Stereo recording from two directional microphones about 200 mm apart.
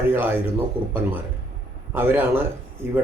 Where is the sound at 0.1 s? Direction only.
10° right (ahead or behind).